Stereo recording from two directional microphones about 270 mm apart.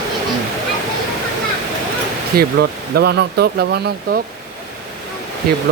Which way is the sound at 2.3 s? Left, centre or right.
Right.